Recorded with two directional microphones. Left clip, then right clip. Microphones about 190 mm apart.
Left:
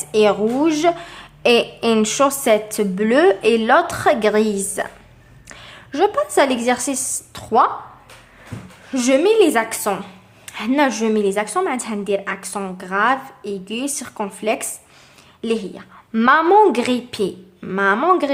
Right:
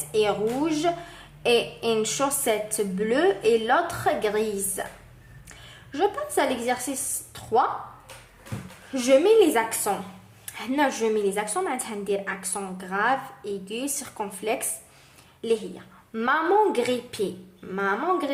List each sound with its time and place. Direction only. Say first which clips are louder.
0.1 s a woman's voice: left 8 dB; 30° left (ahead or behind)
8.9 s a woman's voice: left 3 dB; 30° left (ahead or behind)